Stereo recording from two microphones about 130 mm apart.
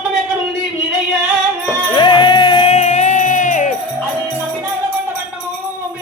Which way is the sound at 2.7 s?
60° left (ahead or behind).